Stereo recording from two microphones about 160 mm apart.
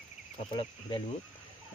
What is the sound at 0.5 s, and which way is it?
Speech, 30° left (ahead or behind).